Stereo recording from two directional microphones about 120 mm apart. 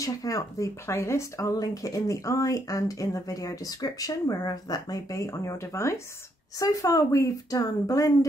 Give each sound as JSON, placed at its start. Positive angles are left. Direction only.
{"t": 0.0, "sound": "speech", "side_deg": 30}